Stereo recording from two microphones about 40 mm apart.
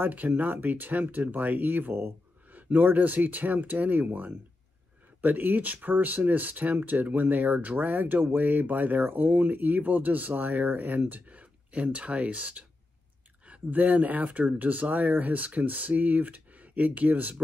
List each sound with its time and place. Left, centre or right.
0.0 s speech: right